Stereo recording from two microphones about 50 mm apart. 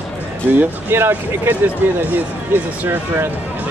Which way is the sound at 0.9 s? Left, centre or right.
Right.